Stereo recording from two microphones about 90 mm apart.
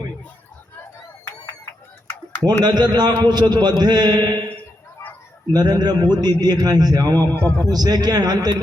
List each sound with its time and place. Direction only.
2.6 s a man's voice: 55° right (ahead or behind)
4.4 s a sound: 20° left (ahead or behind)
5.5 s a man's voice: 50° right (ahead or behind)
7.3 s a man's voice: 15° left (ahead or behind)
7.6 s a man's voice: 45° right (ahead or behind)